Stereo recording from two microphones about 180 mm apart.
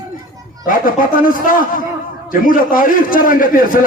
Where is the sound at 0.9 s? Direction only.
50° left (ahead or behind).